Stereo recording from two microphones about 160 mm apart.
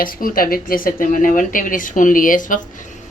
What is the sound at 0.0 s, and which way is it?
A woman's voice, 60° left (ahead or behind).